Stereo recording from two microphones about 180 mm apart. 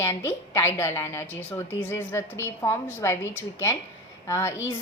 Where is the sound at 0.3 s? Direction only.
15° left (ahead or behind).